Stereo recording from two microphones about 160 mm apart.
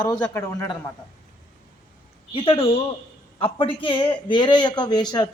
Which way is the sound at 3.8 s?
30° left (ahead or behind).